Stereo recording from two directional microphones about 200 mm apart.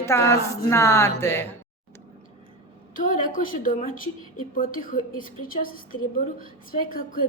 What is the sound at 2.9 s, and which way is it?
Speech, 40° left (ahead or behind).